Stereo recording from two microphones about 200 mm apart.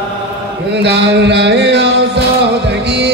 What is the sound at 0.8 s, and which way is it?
Music, 60° right (ahead or behind).